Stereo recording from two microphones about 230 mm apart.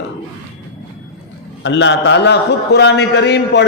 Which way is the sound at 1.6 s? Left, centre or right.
Left.